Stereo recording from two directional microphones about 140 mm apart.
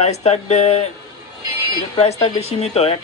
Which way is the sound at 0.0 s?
50° left (ahead or behind).